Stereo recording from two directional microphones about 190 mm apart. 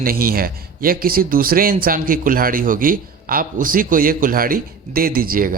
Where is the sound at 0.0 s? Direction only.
50° right (ahead or behind).